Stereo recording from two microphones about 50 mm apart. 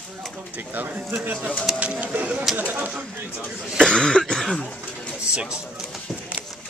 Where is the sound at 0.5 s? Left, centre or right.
Right.